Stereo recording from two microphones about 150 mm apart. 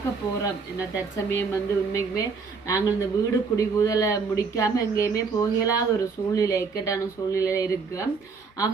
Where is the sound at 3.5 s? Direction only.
20° left (ahead or behind).